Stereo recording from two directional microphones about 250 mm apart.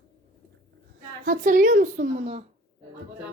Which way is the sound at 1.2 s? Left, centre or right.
Right.